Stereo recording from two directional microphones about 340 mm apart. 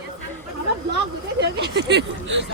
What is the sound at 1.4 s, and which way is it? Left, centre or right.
Speech, right.